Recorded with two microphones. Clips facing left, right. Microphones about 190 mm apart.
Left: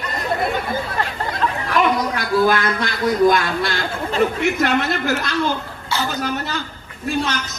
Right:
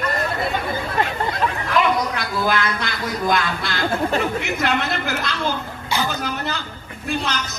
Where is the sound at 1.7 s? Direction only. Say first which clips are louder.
Left 1 dB; 50° left (ahead or behind).